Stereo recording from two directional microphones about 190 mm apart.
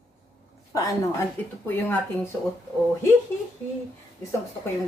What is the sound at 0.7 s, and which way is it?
Speech, 15° left (ahead or behind).